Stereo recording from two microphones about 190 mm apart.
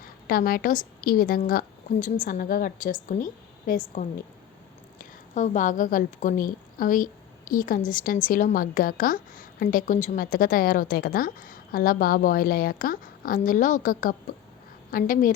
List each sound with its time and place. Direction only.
0.3 s a woman's voice: 50° left (ahead or behind)